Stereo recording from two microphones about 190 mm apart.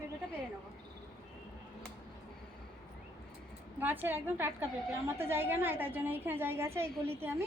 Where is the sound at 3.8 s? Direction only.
10° right (ahead or behind).